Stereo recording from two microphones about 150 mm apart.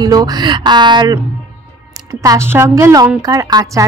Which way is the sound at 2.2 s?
20° right (ahead or behind).